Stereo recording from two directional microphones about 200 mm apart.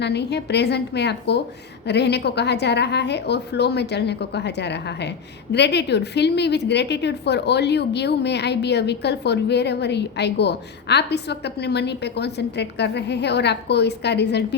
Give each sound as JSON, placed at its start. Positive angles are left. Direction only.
{"t": 0.0, "sound": "a woman's voice", "side_deg": 55}